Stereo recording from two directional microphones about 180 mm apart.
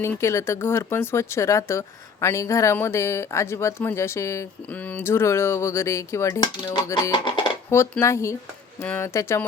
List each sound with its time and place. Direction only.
0.0 s speech: 15° left (ahead or behind)
7.7 s speech: 15° left (ahead or behind)